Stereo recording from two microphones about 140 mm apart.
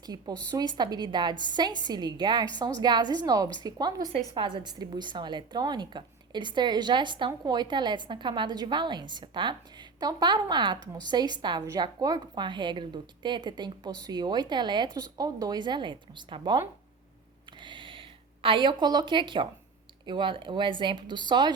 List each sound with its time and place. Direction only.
0.0 s a woman's voice: 30° right (ahead or behind)
17.6 s a sound: 35° right (ahead or behind)
20.1 s a woman's voice: 35° right (ahead or behind)